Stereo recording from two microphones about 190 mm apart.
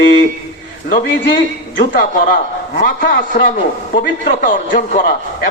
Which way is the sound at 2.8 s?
45° left (ahead or behind).